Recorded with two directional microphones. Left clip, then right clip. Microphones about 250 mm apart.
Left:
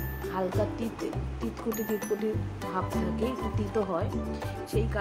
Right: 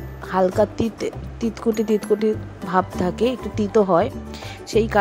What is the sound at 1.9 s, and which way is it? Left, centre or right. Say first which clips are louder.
Speech: right 10 dB; right.